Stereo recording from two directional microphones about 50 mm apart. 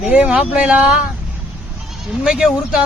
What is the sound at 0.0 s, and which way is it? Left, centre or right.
Speech, right.